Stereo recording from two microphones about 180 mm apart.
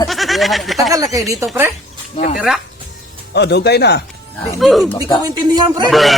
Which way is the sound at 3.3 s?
70° left (ahead or behind).